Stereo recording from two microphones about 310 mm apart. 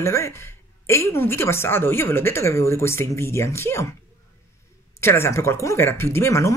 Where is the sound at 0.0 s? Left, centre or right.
Centre.